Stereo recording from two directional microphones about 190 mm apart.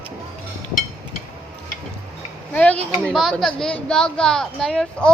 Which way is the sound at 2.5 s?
5° left (ahead or behind).